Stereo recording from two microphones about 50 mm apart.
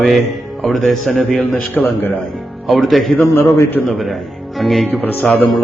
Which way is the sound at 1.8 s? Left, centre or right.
Left.